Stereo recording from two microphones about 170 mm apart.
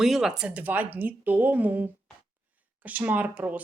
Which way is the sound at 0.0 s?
Centre (ahead or behind).